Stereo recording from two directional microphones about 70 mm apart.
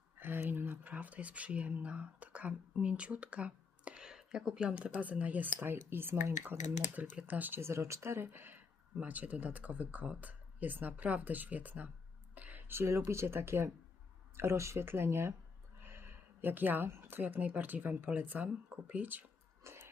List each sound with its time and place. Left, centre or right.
0.2 s speech: right
7.0 s speech: right
7.6 s speech: right
19.6 s a sound: right